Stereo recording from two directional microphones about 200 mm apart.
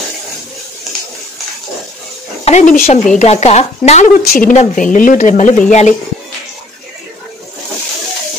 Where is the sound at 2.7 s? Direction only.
45° left (ahead or behind).